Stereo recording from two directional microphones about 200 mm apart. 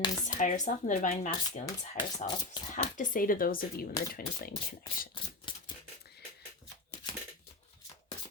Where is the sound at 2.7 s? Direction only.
40° left (ahead or behind).